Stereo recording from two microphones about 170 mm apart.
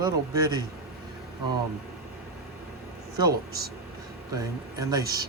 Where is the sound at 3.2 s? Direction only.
20° right (ahead or behind).